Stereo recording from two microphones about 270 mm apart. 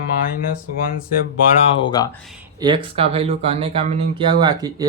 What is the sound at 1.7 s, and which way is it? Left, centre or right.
Speech, centre.